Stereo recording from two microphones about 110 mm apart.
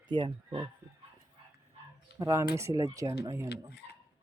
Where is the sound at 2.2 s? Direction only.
25° right (ahead or behind).